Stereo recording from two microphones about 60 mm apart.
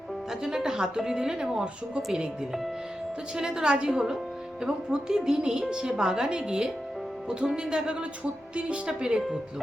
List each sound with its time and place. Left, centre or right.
0.3 s speech: centre